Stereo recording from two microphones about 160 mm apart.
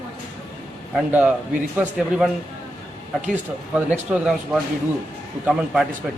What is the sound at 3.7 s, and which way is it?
A man's voice, 10° right (ahead or behind).